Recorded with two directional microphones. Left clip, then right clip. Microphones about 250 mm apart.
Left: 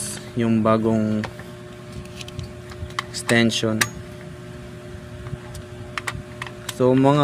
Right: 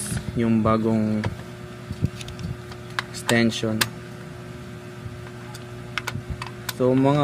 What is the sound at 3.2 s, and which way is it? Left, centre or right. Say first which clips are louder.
Speech: left 3 dB; centre.